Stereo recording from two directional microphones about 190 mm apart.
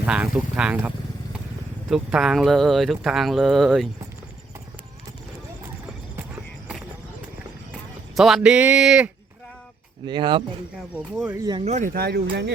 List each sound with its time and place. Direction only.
0.0 s speech: 5° right (ahead or behind)
8.1 s speech: centre (ahead or behind)
10.1 s speech: 25° right (ahead or behind)
10.8 s speech: 5° right (ahead or behind)
11.4 s speech: 25° right (ahead or behind)
11.7 s speech: 45° right (ahead or behind); by 12.5 s 60° right (ahead or behind)